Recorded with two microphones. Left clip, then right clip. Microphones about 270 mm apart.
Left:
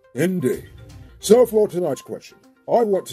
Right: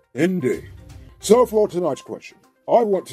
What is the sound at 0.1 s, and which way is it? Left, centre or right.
Speech, right.